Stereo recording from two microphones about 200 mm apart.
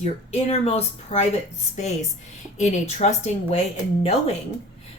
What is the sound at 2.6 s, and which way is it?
Speech, 35° left (ahead or behind).